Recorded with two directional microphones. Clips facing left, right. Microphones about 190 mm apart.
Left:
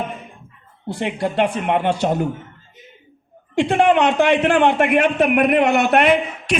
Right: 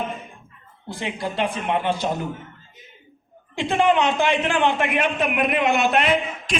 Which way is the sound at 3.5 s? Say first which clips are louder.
Left 4 dB; 70° left (ahead or behind).